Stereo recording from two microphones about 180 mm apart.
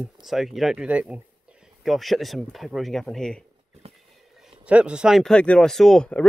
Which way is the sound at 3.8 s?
35° right (ahead or behind).